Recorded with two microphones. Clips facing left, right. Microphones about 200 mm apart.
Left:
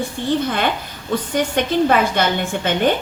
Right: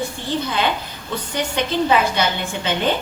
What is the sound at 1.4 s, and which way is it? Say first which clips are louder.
A woman's voice: left 3 dB; 50° left (ahead or behind).